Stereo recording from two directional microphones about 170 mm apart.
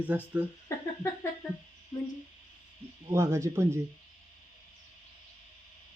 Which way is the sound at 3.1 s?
15° right (ahead or behind).